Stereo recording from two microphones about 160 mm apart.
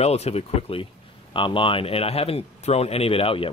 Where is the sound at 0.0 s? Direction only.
40° left (ahead or behind).